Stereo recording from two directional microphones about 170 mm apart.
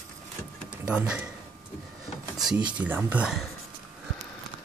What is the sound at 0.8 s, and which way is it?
Speech, 5° right (ahead or behind).